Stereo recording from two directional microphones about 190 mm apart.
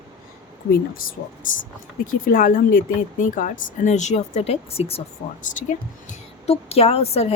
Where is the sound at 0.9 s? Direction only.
50° left (ahead or behind); by 5.0 s 30° left (ahead or behind).